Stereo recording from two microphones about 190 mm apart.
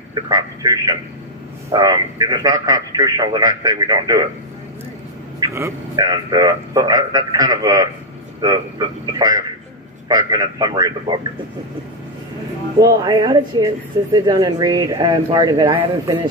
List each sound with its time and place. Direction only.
0.1 s a man's voice: 20° right (ahead or behind)
5.4 s a man's voice: 15° right (ahead or behind)
12.8 s a man's voice: 20° right (ahead or behind)